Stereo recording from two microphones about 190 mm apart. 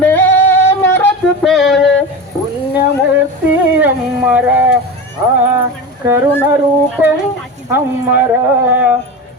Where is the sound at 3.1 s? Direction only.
10° right (ahead or behind).